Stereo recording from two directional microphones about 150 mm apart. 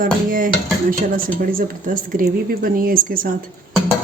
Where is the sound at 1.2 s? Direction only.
70° right (ahead or behind).